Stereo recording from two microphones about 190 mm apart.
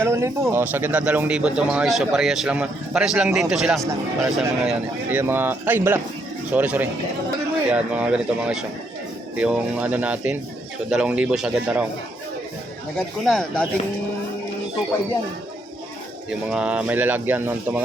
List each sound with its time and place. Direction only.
0.0 s speech: 15° right (ahead or behind)
3.8 s speech: 15° right (ahead or behind)
13.0 s speech: centre (ahead or behind)
16.3 s speech: 5° right (ahead or behind)